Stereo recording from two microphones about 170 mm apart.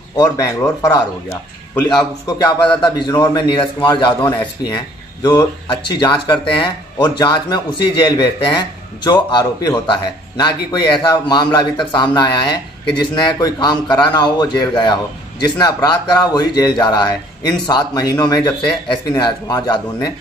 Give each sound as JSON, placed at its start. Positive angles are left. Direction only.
{"t": 0.1, "sound": "speech", "side_deg": 20}
{"t": 2.2, "sound": "speech", "side_deg": 20}